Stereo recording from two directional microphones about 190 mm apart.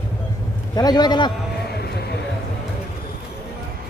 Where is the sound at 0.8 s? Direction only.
20° left (ahead or behind).